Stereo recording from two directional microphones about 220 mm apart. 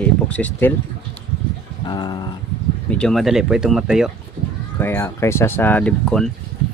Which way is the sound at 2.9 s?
5° left (ahead or behind).